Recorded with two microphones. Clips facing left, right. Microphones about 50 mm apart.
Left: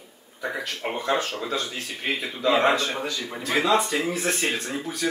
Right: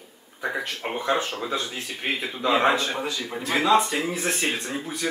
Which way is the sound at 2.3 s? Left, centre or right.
Centre.